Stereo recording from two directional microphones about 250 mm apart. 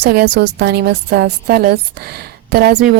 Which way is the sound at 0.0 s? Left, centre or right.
Right.